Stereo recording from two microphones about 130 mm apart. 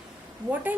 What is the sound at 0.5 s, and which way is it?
Speech, 15° right (ahead or behind).